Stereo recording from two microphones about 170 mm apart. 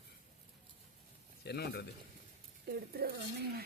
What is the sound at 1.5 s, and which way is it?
Speech, 70° left (ahead or behind).